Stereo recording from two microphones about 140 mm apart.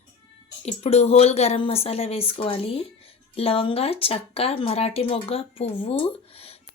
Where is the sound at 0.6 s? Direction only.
45° left (ahead or behind).